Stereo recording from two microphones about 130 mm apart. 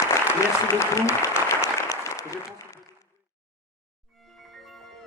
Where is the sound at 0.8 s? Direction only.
20° left (ahead or behind).